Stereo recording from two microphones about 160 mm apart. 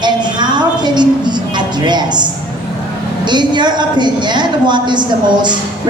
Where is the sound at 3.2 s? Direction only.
30° right (ahead or behind).